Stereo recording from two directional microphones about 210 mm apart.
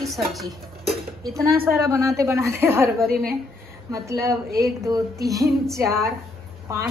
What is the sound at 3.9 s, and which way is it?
A woman's voice, 15° right (ahead or behind).